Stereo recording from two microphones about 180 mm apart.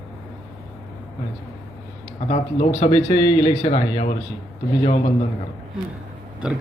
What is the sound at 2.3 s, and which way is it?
Speech, 35° left (ahead or behind).